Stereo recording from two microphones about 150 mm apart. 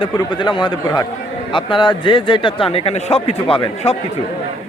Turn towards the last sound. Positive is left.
turn(degrees=40)  # may be behind; listen again after turning